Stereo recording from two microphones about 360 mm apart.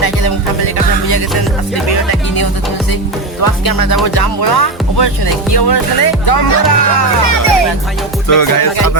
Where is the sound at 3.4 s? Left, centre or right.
Left.